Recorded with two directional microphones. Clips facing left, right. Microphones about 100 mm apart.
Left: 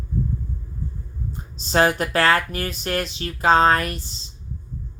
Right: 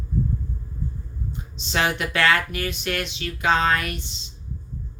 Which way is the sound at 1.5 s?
40° left (ahead or behind).